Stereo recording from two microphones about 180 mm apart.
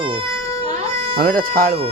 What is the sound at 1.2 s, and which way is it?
Speech, 50° right (ahead or behind).